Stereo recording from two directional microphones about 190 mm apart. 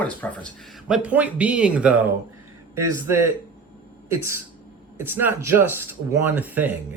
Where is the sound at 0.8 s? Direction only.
5° right (ahead or behind).